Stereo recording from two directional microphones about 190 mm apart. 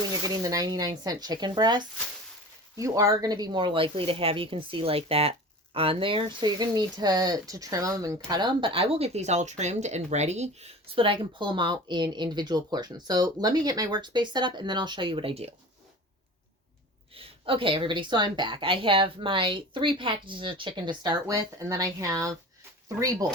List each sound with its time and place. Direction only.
0.4 s speech: 20° right (ahead or behind)
17.2 s speech: 30° right (ahead or behind)